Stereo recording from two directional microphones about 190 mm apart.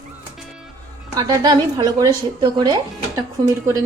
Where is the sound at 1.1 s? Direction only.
20° right (ahead or behind).